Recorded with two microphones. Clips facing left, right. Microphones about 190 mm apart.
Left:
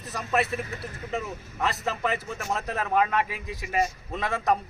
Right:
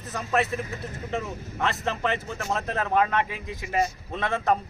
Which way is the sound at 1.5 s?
5° left (ahead or behind).